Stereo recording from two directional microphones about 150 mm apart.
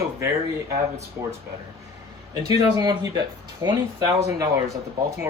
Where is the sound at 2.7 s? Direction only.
25° right (ahead or behind).